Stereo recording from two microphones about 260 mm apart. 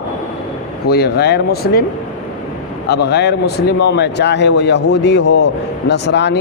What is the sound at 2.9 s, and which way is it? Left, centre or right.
A man's voice, left.